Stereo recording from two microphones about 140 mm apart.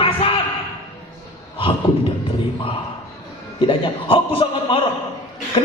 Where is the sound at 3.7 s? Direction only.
40° left (ahead or behind).